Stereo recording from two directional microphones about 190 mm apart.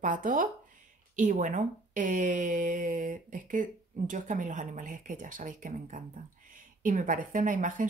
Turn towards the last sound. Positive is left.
turn(degrees=-45)  # may be behind; listen again after turning